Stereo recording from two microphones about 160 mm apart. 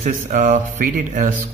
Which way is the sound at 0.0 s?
55° right (ahead or behind).